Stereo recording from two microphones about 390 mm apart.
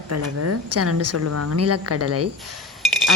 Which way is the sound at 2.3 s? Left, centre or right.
Centre.